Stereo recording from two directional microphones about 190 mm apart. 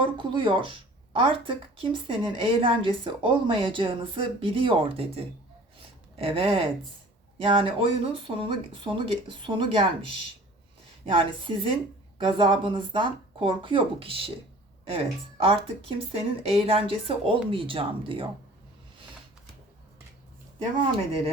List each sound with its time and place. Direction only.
0.0 s speech: 25° right (ahead or behind)